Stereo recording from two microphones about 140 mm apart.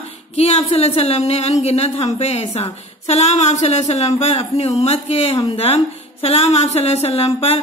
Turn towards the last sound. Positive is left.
turn(degrees=45)  # may be behind; listen again after turning